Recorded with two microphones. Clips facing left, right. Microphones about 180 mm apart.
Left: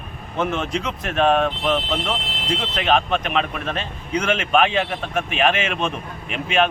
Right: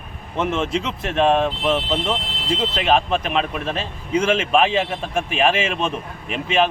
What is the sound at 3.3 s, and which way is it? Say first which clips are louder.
Speech: right 1 dB; 35° right (ahead or behind).